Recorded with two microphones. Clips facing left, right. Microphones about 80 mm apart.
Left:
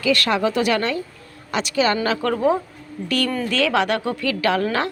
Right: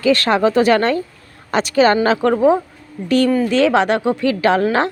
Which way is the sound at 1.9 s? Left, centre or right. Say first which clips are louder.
Right 6 dB; right.